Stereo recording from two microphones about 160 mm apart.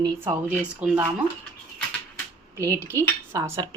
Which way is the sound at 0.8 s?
5° right (ahead or behind).